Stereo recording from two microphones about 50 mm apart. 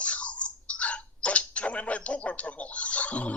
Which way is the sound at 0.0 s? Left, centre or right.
Left.